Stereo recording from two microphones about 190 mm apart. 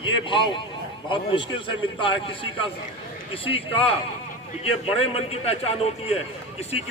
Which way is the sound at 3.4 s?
30° left (ahead or behind).